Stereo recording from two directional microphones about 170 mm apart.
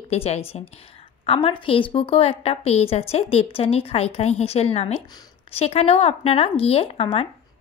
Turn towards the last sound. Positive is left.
turn(degrees=35)  # may be behind; listen again after turning